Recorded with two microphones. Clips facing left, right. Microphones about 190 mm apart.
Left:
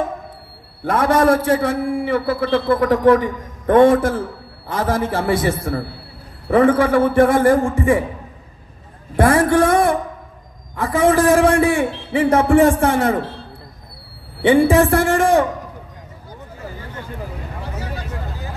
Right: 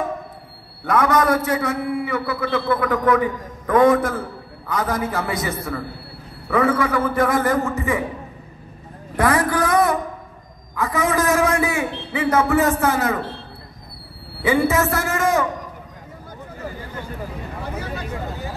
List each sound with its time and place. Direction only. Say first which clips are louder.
0.8 s a man's voice: left 3 dB; 30° left (ahead or behind)
9.1 s a man's voice: left 5 dB; 25° left (ahead or behind)
14.4 s speech: left 6 dB; 30° left (ahead or behind)